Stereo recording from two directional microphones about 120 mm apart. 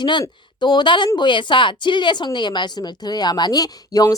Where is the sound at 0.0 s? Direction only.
40° left (ahead or behind).